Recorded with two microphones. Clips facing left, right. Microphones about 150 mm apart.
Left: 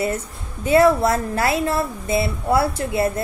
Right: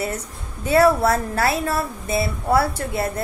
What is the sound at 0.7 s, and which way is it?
Speech, 25° left (ahead or behind).